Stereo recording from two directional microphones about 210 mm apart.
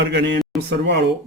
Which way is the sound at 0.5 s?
Centre (ahead or behind).